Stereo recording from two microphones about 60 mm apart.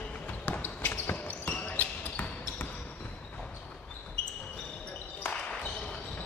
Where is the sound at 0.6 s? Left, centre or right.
Left.